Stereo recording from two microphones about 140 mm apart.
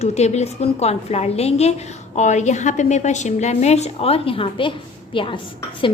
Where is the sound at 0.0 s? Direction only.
50° left (ahead or behind).